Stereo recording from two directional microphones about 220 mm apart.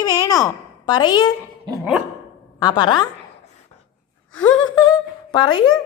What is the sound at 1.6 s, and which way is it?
Dog, 15° right (ahead or behind).